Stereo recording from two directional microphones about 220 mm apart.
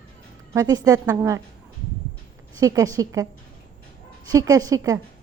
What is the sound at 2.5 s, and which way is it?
Speech, 15° right (ahead or behind).